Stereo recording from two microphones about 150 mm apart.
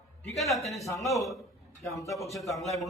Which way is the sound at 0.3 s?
Centre (ahead or behind).